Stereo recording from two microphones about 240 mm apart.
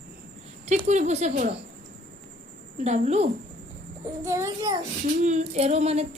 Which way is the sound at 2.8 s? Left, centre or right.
Right.